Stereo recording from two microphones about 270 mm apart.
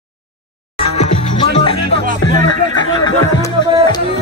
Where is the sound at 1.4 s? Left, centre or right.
Centre.